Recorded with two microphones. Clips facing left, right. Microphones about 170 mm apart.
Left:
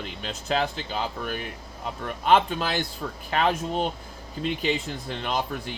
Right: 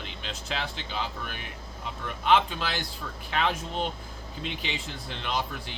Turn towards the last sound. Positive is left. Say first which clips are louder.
# left 3 dB
turn(degrees=45)  # may be behind; listen again after turning